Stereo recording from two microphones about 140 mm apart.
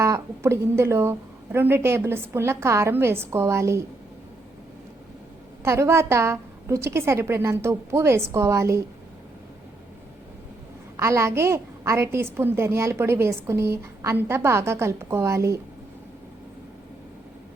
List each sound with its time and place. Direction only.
0.0 s a woman's voice: 20° right (ahead or behind)
5.6 s a woman's voice: 20° right (ahead or behind)
10.9 s a woman's voice: 20° right (ahead or behind)